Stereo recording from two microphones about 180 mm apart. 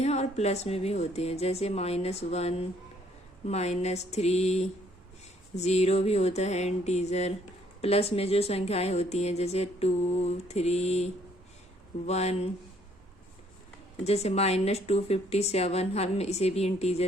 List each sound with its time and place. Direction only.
0.0 s speech: 35° left (ahead or behind)
14.0 s speech: 35° left (ahead or behind)